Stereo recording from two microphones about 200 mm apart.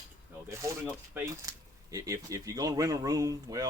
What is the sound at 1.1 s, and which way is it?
Speech, 15° right (ahead or behind).